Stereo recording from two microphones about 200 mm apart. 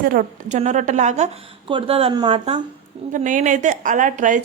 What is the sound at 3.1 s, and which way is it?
A woman's voice, 40° right (ahead or behind).